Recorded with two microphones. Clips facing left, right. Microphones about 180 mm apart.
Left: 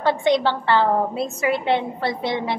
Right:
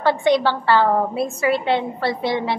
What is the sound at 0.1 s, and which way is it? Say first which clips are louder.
A woman's voice: right 1 dB; 20° left (ahead or behind).